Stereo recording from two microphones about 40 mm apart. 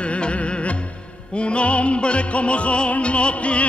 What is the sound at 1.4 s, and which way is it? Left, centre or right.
Music, left.